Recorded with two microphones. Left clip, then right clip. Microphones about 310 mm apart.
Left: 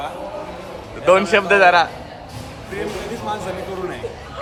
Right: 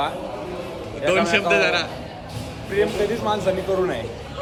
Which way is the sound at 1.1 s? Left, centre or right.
Centre.